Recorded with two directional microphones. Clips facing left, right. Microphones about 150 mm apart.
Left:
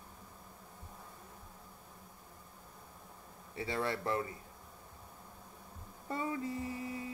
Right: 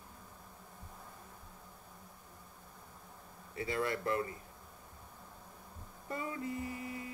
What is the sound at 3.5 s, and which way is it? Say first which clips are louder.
Speech: right 1 dB; 30° left (ahead or behind).